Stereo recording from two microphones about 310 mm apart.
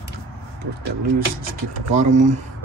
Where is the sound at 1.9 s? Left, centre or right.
Right.